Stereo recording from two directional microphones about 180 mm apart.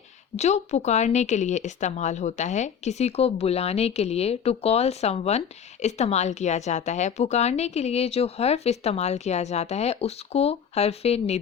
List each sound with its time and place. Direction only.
0.3 s a woman's voice: 40° left (ahead or behind)